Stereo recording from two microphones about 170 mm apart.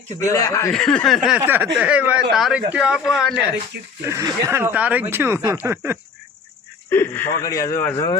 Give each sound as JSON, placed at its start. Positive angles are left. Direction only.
{"t": 0.2, "sound": "speech", "side_deg": 20}
{"t": 0.7, "sound": "speech", "side_deg": 5}
{"t": 1.4, "sound": "speech", "side_deg": -10}
{"t": 4.0, "sound": "speech", "side_deg": -20}
{"t": 6.9, "sound": "speech", "side_deg": 10}